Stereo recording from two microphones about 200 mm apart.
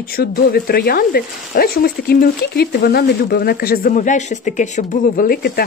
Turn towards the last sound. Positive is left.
turn(degrees=50)  # may be behind; listen again after turning